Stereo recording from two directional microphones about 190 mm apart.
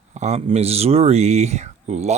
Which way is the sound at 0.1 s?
35° right (ahead or behind).